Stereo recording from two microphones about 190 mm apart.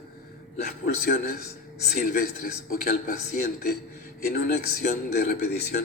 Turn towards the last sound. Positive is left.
turn(degrees=55)  # may be behind; listen again after turning